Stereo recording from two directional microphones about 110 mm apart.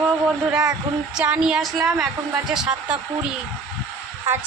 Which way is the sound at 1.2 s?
5° right (ahead or behind).